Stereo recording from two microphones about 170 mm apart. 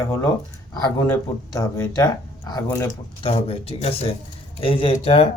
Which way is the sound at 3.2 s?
35° left (ahead or behind).